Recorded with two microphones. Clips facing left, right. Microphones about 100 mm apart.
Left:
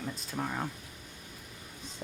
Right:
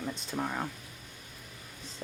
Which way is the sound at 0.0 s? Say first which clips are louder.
Right 2 dB; centre (ahead or behind).